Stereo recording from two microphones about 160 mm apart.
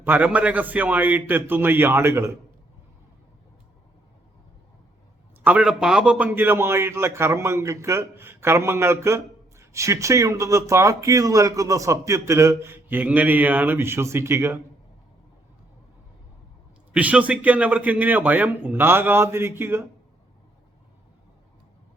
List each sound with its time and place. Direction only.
0.0 s a man's voice: 10° right (ahead or behind)
5.4 s a man's voice: 10° right (ahead or behind)
16.9 s a man's voice: 10° right (ahead or behind)